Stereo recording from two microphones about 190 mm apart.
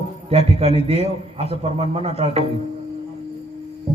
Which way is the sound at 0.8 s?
35° left (ahead or behind).